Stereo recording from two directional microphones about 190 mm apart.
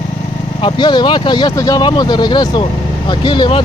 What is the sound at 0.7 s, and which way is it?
Speech, 25° left (ahead or behind).